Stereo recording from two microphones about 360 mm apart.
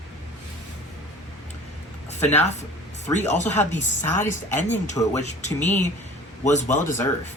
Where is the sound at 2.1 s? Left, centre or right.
Centre.